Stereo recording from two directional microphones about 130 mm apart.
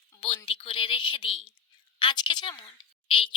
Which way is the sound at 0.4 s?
40° left (ahead or behind).